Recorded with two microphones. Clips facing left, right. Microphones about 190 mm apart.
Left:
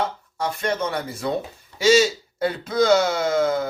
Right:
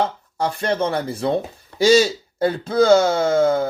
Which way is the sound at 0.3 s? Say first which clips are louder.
Right 4 dB; 30° right (ahead or behind).